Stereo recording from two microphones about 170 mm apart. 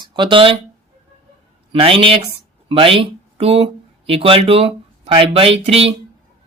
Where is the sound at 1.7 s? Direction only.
30° right (ahead or behind).